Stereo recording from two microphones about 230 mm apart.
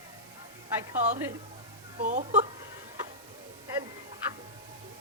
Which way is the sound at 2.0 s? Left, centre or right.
Right.